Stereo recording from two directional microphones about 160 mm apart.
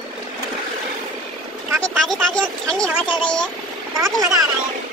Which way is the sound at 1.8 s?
5° left (ahead or behind).